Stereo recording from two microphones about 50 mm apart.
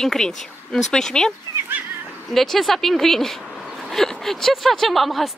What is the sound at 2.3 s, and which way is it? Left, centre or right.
Speech, centre.